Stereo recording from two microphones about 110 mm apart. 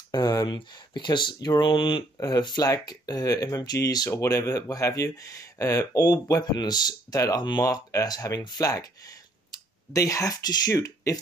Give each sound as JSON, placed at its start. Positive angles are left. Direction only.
{"t": 0.1, "sound": "speech", "side_deg": 35}
{"t": 2.1, "sound": "speech", "side_deg": 35}